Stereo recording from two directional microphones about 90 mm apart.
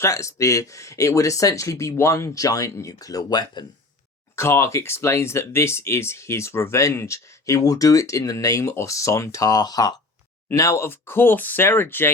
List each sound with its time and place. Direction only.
0.0 s speech: 35° left (ahead or behind); by 3.7 s 50° left (ahead or behind)
4.4 s speech: 30° left (ahead or behind); by 9.9 s 45° left (ahead or behind)
10.5 s speech: 30° left (ahead or behind)